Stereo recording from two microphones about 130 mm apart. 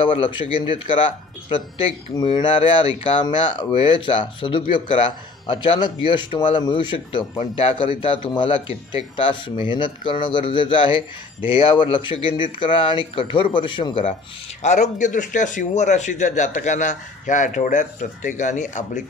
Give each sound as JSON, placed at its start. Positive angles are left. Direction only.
{"t": 0.0, "sound": "a man's voice", "side_deg": 40}
{"t": 2.1, "sound": "a man's voice", "side_deg": 35}
{"t": 2.4, "sound": "a man's voice", "side_deg": 45}
{"t": 7.3, "sound": "a man's voice", "side_deg": 50}
{"t": 14.6, "sound": "a man's voice", "side_deg": 65}